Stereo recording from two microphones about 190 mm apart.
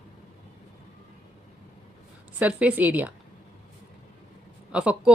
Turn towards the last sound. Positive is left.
turn(degrees=-5)  # may be behind; listen again after turning